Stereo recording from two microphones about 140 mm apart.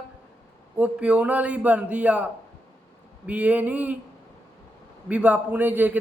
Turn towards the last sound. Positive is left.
turn(degrees=-10)  # may be behind; listen again after turning